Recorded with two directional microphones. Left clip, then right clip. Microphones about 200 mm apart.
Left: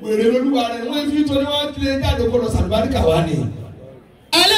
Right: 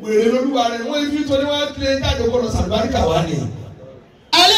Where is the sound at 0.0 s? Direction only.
Centre (ahead or behind).